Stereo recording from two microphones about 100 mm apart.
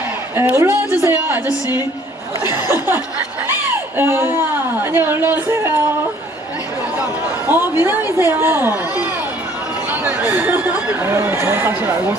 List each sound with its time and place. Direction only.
0.3 s speech: 25° right (ahead or behind)
7.4 s speech: 20° right (ahead or behind)